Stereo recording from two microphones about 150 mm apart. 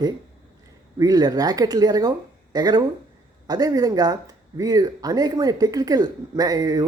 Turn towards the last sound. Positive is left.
turn(degrees=-25)  # may be behind; listen again after turning